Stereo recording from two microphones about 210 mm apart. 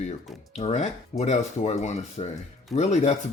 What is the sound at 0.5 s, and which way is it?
Speech, 30° left (ahead or behind).